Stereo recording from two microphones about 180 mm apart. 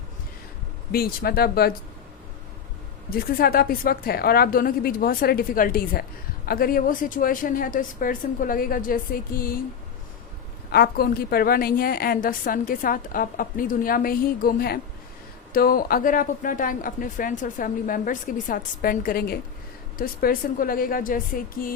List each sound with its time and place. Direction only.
0.9 s speech: 55° left (ahead or behind)
3.1 s a woman's voice: 55° left (ahead or behind)
10.7 s a woman's voice: 60° left (ahead or behind)